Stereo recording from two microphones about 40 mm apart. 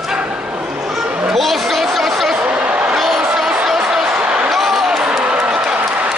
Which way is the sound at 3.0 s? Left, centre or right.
Centre.